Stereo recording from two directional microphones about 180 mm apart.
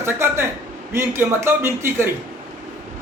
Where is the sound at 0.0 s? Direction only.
15° right (ahead or behind).